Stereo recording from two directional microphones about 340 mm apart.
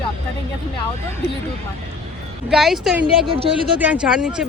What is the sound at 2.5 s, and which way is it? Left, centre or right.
Speech, centre.